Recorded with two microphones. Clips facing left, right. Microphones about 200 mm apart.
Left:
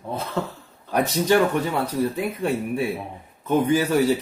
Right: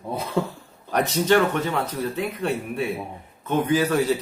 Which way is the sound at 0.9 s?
10° left (ahead or behind).